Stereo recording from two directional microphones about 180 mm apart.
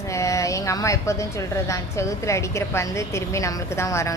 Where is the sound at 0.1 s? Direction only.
15° left (ahead or behind).